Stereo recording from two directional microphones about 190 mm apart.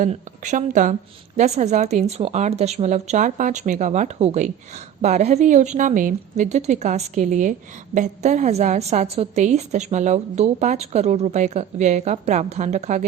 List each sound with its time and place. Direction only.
0.0 s a woman's voice: 40° right (ahead or behind)